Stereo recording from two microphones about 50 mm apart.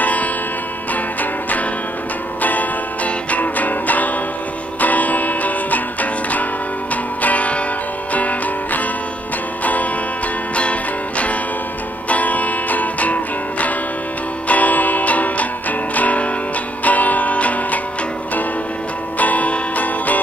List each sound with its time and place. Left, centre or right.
0.0 s music: left
2.4 s music: left
10.5 s music: left
19.1 s music: left